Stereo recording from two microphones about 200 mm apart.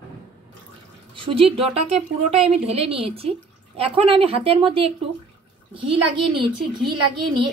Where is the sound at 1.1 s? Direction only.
25° right (ahead or behind).